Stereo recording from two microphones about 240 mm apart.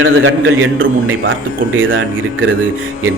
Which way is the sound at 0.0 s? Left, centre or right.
Right.